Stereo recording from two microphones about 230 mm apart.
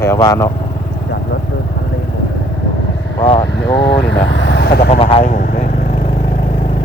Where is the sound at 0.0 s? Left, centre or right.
Centre.